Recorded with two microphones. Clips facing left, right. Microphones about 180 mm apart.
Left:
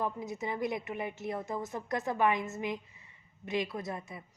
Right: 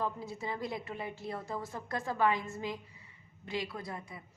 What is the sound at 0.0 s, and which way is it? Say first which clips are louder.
A woman's voice: left 2 dB; 20° left (ahead or behind).